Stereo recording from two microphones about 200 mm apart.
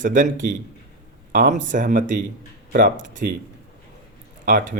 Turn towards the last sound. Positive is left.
turn(degrees=-40)  # may be behind; listen again after turning